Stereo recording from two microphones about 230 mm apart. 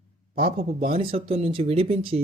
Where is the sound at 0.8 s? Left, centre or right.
Right.